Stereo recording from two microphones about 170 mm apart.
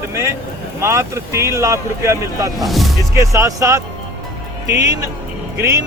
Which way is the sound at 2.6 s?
Centre (ahead or behind).